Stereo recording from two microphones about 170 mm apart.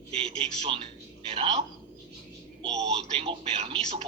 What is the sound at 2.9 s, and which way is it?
Speech, 35° right (ahead or behind).